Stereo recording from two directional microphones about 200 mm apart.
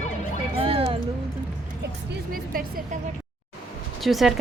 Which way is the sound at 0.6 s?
30° right (ahead or behind).